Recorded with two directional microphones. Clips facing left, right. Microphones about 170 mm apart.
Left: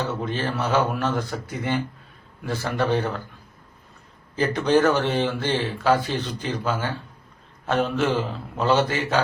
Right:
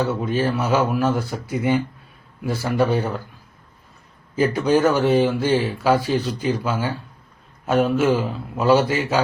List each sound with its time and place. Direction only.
0.0 s speech: 10° right (ahead or behind)
4.4 s speech: 10° right (ahead or behind)